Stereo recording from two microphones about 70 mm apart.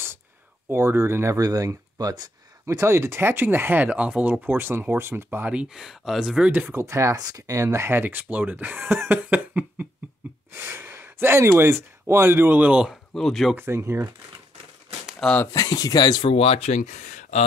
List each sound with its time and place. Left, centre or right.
0.7 s speech: right
1.3 s speech: right
2.6 s speech: right
5.5 s speech: centre
6.7 s speech: right
7.2 s speech: right
9.1 s cough: right
10.7 s gasp: right
11.4 s speech: right
13.1 s speech: centre
13.7 s speech: right
15.5 s speech: left